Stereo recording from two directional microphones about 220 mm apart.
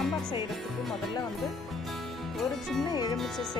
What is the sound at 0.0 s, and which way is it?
Music, centre (ahead or behind).